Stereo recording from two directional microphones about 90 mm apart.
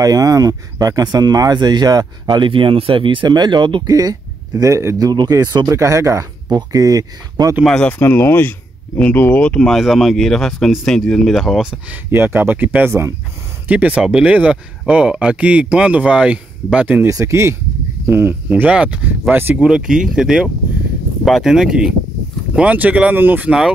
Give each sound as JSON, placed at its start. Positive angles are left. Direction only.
{"t": 0.0, "sound": "speech", "side_deg": -40}
{"t": 3.3, "sound": "speech", "side_deg": -55}
{"t": 3.8, "sound": "speech", "side_deg": -45}
{"t": 5.7, "sound": "speech", "side_deg": -35}
{"t": 7.6, "sound": "speech", "side_deg": 5}
{"t": 8.0, "sound": "speech", "side_deg": 25}
{"t": 11.9, "sound": "speech", "side_deg": -25}
{"t": 17.1, "sound": "speech", "side_deg": -35}
{"t": 18.5, "sound": "speech", "side_deg": -15}
{"t": 19.3, "sound": "speech", "side_deg": -25}
{"t": 19.6, "sound": "speech", "side_deg": -10}